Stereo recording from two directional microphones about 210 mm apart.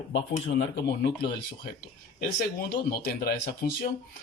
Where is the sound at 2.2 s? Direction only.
45° left (ahead or behind).